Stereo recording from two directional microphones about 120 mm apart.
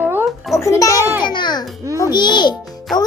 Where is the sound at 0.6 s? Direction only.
25° left (ahead or behind).